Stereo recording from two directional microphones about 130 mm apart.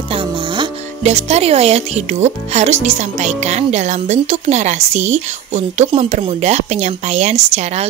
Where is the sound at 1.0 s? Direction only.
55° right (ahead or behind).